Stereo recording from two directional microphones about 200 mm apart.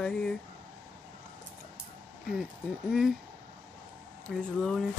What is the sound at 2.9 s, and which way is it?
Speech, centre (ahead or behind).